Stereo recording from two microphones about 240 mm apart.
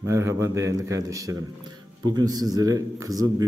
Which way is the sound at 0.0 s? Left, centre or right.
Centre.